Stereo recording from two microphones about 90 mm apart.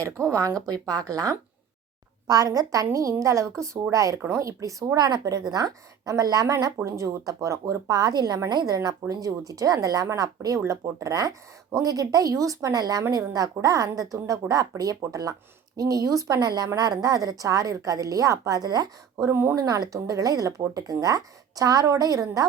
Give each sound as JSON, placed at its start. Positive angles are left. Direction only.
{"t": 0.0, "sound": "speech", "side_deg": -35}
{"t": 19.1, "sound": "speech", "side_deg": -30}
{"t": 19.5, "sound": "speech", "side_deg": -45}